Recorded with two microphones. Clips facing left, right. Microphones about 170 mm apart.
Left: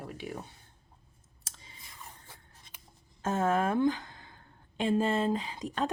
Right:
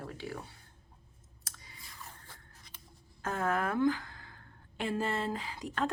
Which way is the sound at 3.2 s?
25° left (ahead or behind).